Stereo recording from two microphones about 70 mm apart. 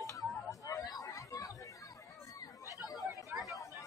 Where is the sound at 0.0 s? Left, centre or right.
Left.